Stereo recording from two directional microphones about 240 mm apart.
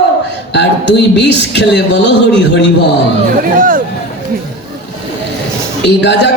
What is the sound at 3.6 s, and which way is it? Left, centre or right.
Speech, right.